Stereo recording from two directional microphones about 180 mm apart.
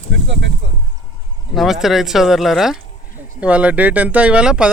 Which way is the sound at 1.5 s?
Centre (ahead or behind).